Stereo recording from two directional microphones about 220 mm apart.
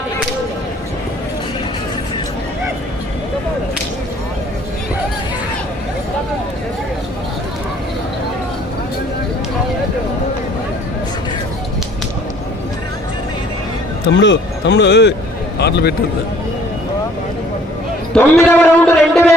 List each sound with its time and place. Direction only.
14.1 s a man's voice: 55° left (ahead or behind)
18.1 s a man's voice: 10° left (ahead or behind)